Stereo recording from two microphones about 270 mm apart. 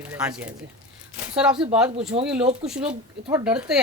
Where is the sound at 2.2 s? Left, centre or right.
Centre.